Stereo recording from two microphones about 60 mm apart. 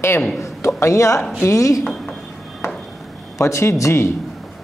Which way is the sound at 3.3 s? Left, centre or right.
Left.